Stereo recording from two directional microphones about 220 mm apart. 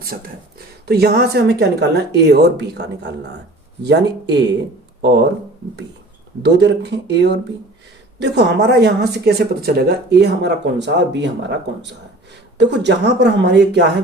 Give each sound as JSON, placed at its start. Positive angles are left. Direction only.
{"t": 0.1, "sound": "speech", "side_deg": -45}
{"t": 6.4, "sound": "speech", "side_deg": -50}